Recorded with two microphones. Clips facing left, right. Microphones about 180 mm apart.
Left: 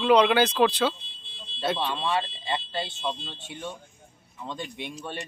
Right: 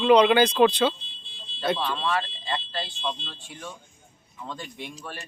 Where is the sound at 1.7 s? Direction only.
25° left (ahead or behind).